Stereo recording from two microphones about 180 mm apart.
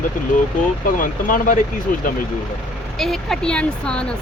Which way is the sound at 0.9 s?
45° left (ahead or behind).